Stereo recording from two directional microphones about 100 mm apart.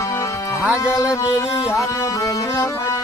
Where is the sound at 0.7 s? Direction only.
35° left (ahead or behind).